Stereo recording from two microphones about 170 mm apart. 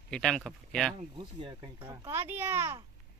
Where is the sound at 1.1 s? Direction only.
30° right (ahead or behind).